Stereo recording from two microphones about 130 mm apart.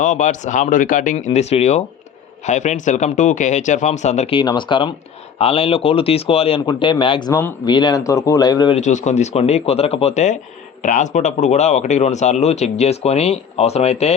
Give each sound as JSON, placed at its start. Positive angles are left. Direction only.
{"t": 0.0, "sound": "speech", "side_deg": 70}
{"t": 1.1, "sound": "speech", "side_deg": 60}
{"t": 4.3, "sound": "speech", "side_deg": 40}
{"t": 8.7, "sound": "speech", "side_deg": 65}
{"t": 10.8, "sound": "speech", "side_deg": 70}